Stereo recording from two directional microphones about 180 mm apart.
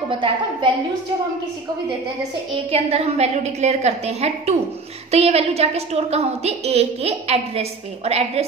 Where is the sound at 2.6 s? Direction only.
35° right (ahead or behind).